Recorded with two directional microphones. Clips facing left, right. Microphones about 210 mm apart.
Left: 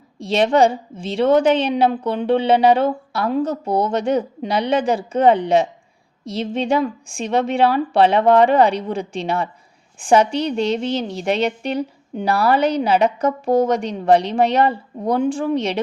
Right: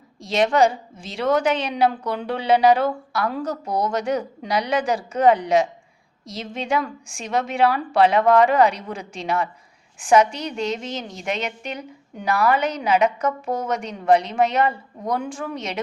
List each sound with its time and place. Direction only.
0.2 s a woman's voice: 30° left (ahead or behind)